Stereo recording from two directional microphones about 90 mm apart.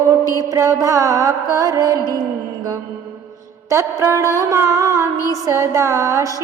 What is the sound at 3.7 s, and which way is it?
Music, 35° right (ahead or behind).